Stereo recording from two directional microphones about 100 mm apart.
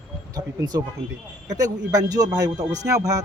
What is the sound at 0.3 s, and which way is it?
Speech, 40° right (ahead or behind).